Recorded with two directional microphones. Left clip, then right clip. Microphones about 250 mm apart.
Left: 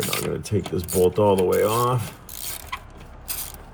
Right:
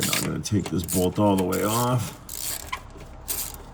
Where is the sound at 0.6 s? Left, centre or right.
Centre.